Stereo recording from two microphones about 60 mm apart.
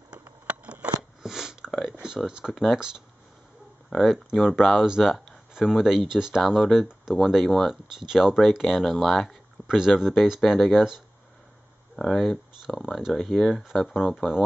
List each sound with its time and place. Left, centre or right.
0.2 s a sound: right
1.2 s a sound: centre
2.0 s speech: centre
4.0 s speech: centre
9.8 s speech: centre
11.9 s speech: centre
13.1 s speech: centre